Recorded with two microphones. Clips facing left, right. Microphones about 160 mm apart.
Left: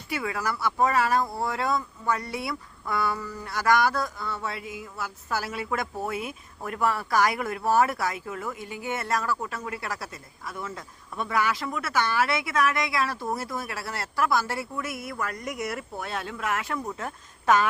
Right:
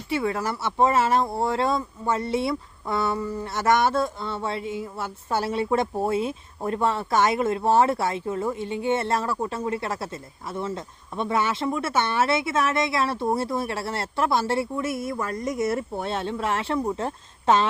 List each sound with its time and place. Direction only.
0.1 s speech: 30° right (ahead or behind)